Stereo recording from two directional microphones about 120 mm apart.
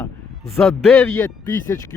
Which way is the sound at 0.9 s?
20° left (ahead or behind).